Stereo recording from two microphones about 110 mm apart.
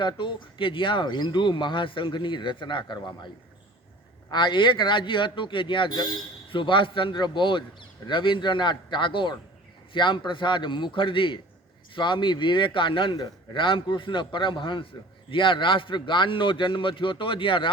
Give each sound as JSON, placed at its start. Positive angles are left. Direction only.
{"t": 0.0, "sound": "speech", "side_deg": 45}
{"t": 4.3, "sound": "speech", "side_deg": 45}